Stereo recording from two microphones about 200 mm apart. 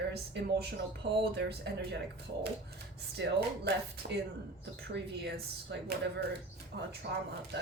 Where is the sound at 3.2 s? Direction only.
55° right (ahead or behind).